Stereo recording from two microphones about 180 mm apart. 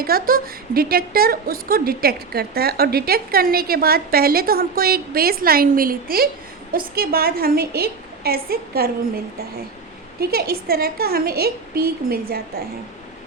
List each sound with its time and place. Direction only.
0.0 s a woman's voice: 55° right (ahead or behind)
10.2 s a woman's voice: 60° right (ahead or behind)